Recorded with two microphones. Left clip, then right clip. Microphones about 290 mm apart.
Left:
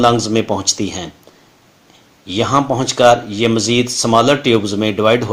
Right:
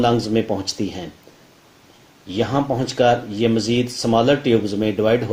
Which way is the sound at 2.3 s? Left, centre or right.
Left.